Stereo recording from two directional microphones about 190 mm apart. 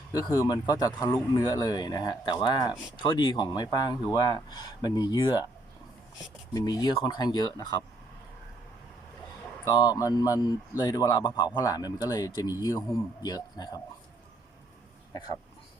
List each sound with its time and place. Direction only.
0.1 s speech: 20° left (ahead or behind)
6.5 s speech: 20° left (ahead or behind)
9.6 s speech: 20° left (ahead or behind)